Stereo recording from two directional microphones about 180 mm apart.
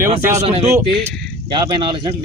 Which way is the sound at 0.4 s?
35° right (ahead or behind).